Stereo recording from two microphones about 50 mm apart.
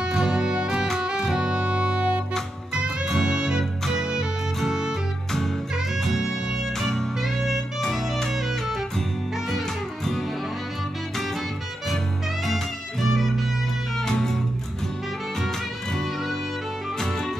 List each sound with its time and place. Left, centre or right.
0.1 s music: centre
0.9 s saxophone: centre
3.2 s music: centre
5.9 s music: centre
7.2 s music: centre
7.8 s music: centre
12.4 s music: centre
13.9 s music: centre
15.4 s music: centre